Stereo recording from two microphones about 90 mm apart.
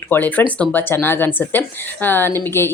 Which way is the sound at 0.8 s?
25° left (ahead or behind).